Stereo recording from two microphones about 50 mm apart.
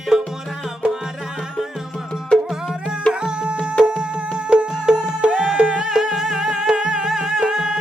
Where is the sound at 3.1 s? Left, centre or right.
Centre.